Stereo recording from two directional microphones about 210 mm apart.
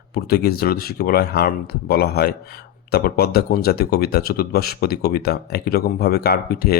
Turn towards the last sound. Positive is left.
turn(degrees=45)  # may be behind; listen again after turning